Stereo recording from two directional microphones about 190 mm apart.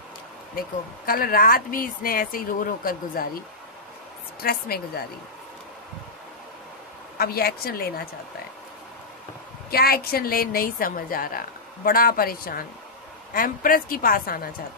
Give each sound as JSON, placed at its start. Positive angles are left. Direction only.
{"t": 0.6, "sound": "a woman's voice", "side_deg": 50}
{"t": 7.2, "sound": "a woman's voice", "side_deg": 55}
{"t": 9.7, "sound": "a woman's voice", "side_deg": 55}